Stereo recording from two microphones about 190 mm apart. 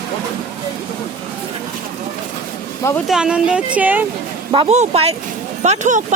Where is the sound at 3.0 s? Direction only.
5° right (ahead or behind).